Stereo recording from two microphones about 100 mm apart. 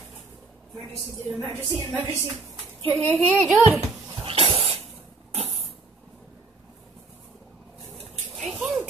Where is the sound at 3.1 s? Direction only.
10° left (ahead or behind).